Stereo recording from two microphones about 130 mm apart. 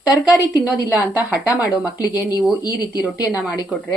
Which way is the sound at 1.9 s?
30° left (ahead or behind).